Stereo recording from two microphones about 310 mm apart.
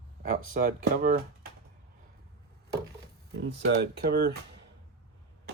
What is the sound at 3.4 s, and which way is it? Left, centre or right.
Speech, right.